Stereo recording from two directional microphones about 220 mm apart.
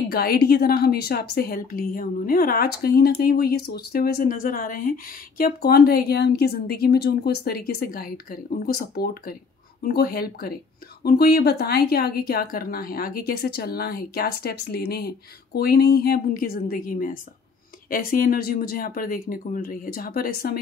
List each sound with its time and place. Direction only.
0.1 s a woman's voice: 45° left (ahead or behind)